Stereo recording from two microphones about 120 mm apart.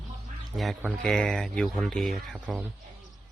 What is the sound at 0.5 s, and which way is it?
Speech, centre (ahead or behind).